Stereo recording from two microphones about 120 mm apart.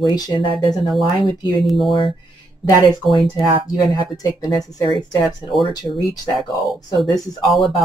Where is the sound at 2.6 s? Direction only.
30° left (ahead or behind).